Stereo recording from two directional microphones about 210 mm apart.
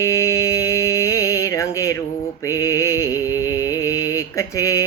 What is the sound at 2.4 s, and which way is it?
Music, 15° left (ahead or behind).